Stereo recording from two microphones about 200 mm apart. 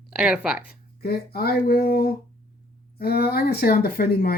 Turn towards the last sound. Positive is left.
turn(degrees=50)  # may be behind; listen again after turning